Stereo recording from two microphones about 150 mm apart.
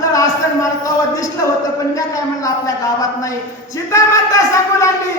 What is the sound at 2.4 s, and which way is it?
Speech, 20° left (ahead or behind).